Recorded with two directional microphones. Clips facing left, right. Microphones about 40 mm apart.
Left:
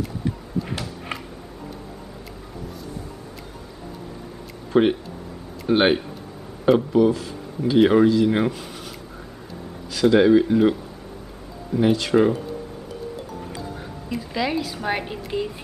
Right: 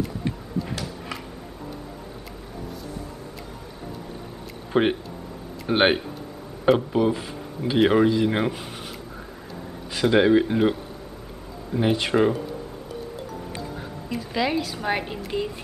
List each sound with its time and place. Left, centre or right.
4.7 s speech: centre
7.8 s speech: centre
9.9 s speech: centre
14.0 s a woman's voice: centre